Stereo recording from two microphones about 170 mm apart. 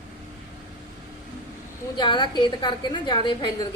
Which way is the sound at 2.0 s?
25° left (ahead or behind).